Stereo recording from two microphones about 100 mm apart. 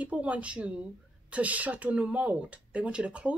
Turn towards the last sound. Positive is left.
turn(degrees=-10)  # may be behind; listen again after turning